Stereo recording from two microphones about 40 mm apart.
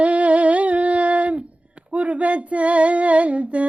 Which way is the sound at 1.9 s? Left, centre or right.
Right.